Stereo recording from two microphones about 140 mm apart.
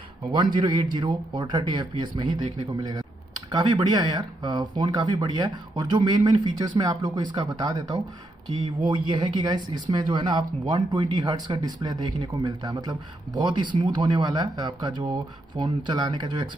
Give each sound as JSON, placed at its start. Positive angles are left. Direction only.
{"t": 0.3, "sound": "a man's voice", "side_deg": -35}